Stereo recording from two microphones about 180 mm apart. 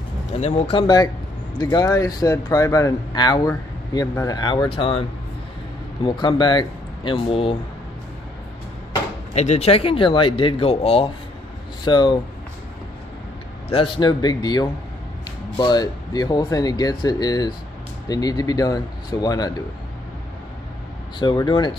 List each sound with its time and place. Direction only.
0.3 s speech: 35° left (ahead or behind)
6.0 s speech: 25° left (ahead or behind)
9.3 s speech: 40° left (ahead or behind)
13.7 s speech: 30° left (ahead or behind)
21.2 s speech: 25° left (ahead or behind)